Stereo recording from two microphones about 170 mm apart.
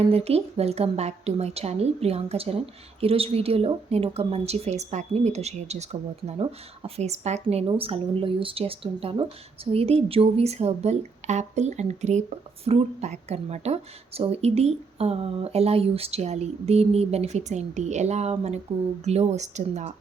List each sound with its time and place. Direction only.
0.1 s speech: 35° right (ahead or behind)